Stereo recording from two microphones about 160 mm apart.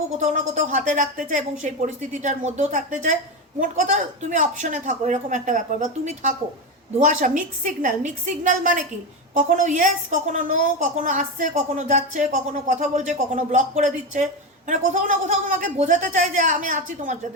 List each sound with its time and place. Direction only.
0.2 s a woman's voice: 50° right (ahead or behind)